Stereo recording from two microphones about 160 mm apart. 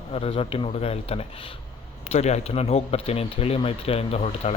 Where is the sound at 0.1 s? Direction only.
35° left (ahead or behind).